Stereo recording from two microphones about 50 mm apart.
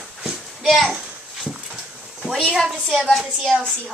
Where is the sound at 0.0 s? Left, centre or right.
Centre.